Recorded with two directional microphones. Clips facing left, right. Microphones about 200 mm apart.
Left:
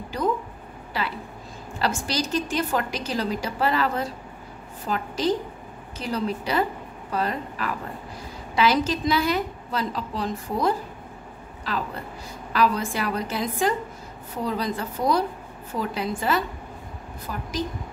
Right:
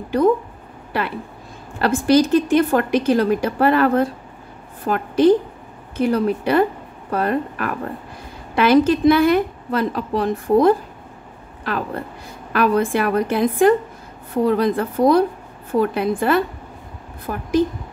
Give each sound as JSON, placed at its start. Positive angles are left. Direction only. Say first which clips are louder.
{"t": 0.9, "sound": "a woman's voice", "louder": "right 6 dB", "side_deg": -55}